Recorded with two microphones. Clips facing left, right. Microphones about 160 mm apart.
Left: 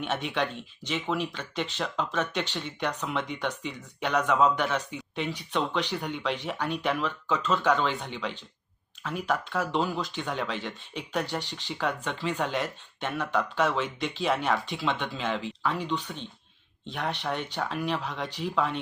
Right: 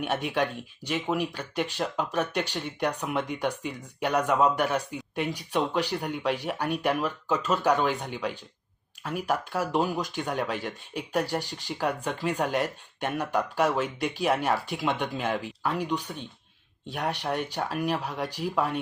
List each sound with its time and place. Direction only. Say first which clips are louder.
0.0 s speech: right 2 dB; 10° right (ahead or behind)